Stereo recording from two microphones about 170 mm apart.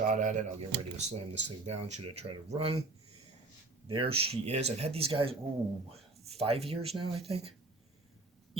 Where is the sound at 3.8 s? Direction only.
30° right (ahead or behind).